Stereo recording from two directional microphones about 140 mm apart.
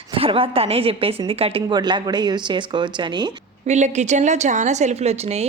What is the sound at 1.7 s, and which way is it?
Speech, 30° right (ahead or behind).